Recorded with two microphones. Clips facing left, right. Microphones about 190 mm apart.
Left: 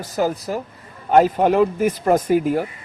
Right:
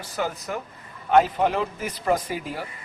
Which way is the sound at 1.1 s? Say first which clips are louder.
Left 5 dB; 45° left (ahead or behind).